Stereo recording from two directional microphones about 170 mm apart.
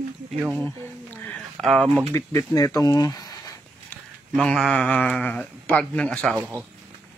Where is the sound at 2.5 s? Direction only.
20° left (ahead or behind).